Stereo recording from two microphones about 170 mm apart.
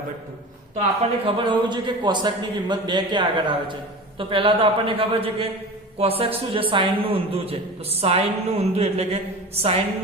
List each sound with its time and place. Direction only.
0.8 s a man's voice: 30° right (ahead or behind)